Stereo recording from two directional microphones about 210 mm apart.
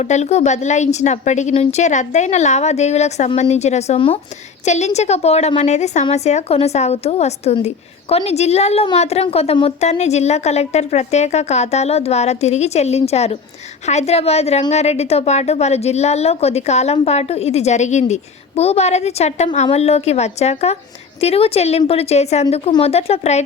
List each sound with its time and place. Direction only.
0.0 s a woman's voice: 35° left (ahead or behind)